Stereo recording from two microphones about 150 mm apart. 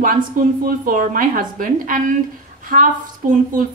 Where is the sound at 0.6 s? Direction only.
65° right (ahead or behind).